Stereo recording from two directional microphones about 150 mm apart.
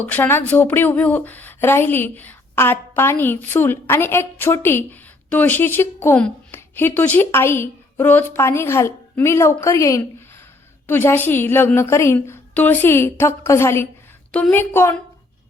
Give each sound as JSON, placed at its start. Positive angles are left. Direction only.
{"t": 0.0, "sound": "speech", "side_deg": 10}